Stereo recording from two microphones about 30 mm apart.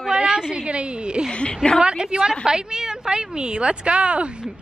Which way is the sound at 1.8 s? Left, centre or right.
Right.